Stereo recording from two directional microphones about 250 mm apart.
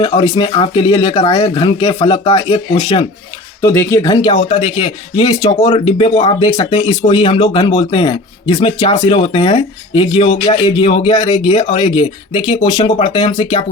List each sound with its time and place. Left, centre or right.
0.0 s speech: left